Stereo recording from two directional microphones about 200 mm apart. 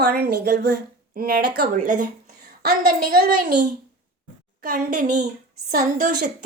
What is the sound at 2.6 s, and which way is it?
A woman's voice, 50° right (ahead or behind).